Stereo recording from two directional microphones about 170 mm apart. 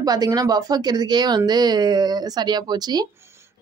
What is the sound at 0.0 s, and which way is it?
Speech, 25° right (ahead or behind).